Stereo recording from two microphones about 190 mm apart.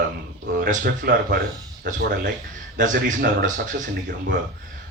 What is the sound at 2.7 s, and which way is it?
A man's voice, 45° right (ahead or behind).